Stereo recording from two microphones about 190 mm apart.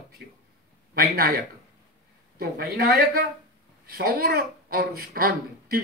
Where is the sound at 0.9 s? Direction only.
50° right (ahead or behind).